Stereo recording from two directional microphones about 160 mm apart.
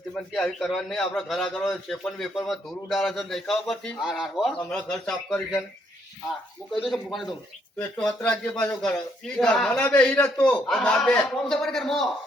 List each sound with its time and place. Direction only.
0.1 s a man's voice: 5° left (ahead or behind)
6.8 s a man's voice: centre (ahead or behind)